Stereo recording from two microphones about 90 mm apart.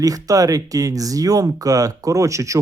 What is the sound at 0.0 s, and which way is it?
Speech, 40° right (ahead or behind).